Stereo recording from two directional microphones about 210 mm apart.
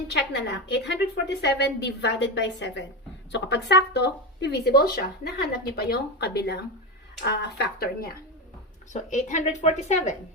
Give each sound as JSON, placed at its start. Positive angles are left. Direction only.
{"t": 0.1, "sound": "speech", "side_deg": 55}
{"t": 8.9, "sound": "speech", "side_deg": 35}